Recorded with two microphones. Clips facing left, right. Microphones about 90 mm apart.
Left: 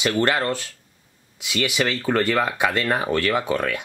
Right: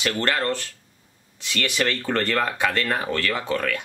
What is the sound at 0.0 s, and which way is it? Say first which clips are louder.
Speech: left 3 dB; 15° left (ahead or behind).